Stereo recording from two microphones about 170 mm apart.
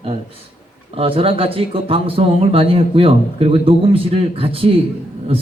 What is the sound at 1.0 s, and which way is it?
Speech, 35° right (ahead or behind).